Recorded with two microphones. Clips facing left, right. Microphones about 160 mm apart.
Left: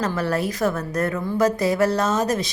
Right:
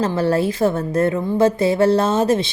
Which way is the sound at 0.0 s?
30° right (ahead or behind).